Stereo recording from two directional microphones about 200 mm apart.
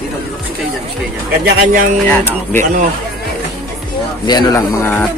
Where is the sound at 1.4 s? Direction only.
45° right (ahead or behind).